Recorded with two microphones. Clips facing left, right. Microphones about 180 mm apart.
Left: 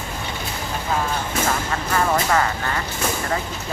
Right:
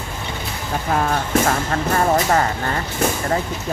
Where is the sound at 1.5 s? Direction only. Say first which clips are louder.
Right 4 dB; 40° right (ahead or behind).